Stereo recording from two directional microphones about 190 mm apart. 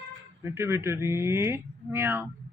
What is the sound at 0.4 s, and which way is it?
Speech, 15° right (ahead or behind).